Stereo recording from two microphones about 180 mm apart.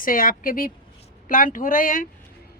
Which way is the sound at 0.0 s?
50° left (ahead or behind).